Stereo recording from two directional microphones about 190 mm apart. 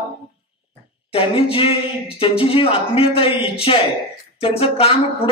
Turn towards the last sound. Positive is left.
turn(degrees=30)  # may be behind; listen again after turning